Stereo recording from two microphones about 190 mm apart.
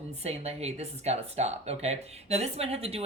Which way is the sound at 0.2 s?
35° right (ahead or behind).